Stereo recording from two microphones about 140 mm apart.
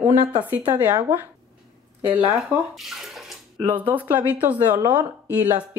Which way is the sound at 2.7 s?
Centre (ahead or behind).